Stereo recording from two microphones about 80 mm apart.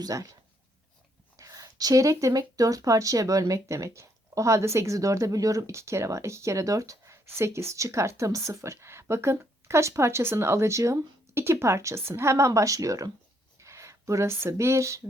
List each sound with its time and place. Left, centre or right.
0.0 s speech: right
1.4 s speech: right